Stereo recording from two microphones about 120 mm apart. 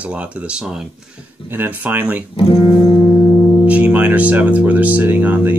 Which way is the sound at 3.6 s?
10° right (ahead or behind).